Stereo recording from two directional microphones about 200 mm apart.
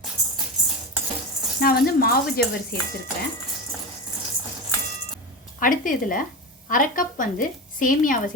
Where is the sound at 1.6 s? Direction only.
50° left (ahead or behind).